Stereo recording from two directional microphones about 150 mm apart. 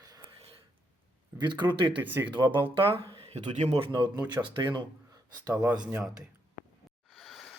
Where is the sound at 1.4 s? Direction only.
30° right (ahead or behind).